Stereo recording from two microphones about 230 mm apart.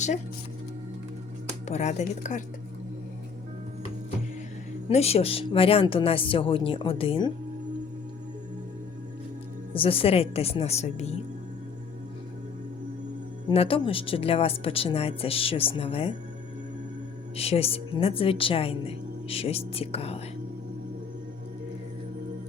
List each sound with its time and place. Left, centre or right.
1.6 s speech: left
4.9 s speech: left
9.7 s speech: left
13.5 s speech: left
17.3 s speech: left